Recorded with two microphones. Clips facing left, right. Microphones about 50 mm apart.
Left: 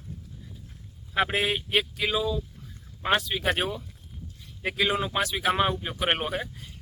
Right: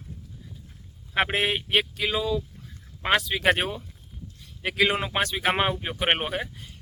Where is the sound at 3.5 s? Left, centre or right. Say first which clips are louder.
Even; right.